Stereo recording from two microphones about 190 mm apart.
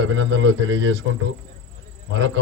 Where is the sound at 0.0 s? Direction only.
90° right.